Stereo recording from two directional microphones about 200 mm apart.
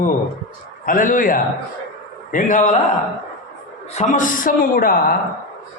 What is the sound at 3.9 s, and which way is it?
Speech, 35° left (ahead or behind).